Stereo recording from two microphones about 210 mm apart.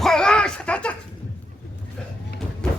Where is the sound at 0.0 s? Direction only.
5° left (ahead or behind).